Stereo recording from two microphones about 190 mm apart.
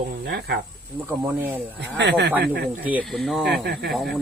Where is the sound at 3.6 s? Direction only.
60° right (ahead or behind).